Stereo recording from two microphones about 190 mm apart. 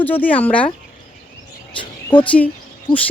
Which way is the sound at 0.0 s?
10° left (ahead or behind).